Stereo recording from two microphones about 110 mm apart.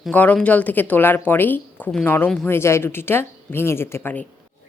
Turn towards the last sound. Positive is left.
turn(degrees=15)  # may be behind; listen again after turning